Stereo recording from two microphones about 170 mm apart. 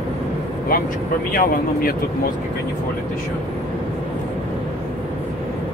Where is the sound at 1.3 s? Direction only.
60° left (ahead or behind).